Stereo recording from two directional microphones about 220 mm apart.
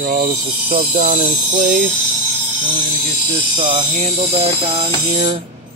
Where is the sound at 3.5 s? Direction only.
30° right (ahead or behind).